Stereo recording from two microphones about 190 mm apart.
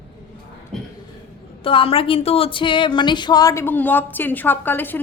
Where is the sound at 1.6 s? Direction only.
30° left (ahead or behind).